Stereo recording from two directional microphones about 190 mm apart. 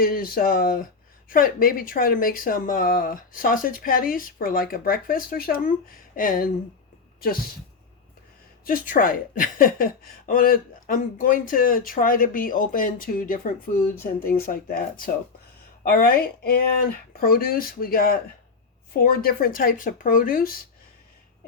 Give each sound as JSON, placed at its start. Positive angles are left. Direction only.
{"t": 0.0, "sound": "a woman's voice", "side_deg": 50}
{"t": 8.6, "sound": "a woman's voice", "side_deg": 45}